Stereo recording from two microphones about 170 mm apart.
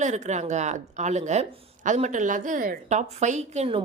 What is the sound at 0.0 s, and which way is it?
Speech, 45° right (ahead or behind).